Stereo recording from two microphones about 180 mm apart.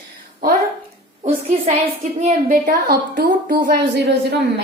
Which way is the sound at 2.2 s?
50° right (ahead or behind).